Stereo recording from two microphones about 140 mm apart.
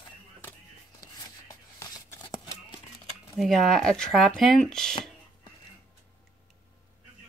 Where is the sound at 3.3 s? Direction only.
Centre (ahead or behind).